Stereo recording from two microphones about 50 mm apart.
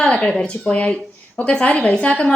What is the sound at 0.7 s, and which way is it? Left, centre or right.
A woman's voice, left.